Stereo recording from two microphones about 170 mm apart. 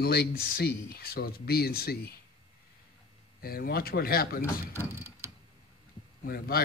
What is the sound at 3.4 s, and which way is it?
Speech, 60° left (ahead or behind).